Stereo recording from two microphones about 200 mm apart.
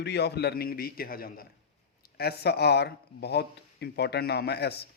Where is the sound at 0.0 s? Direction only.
55° left (ahead or behind).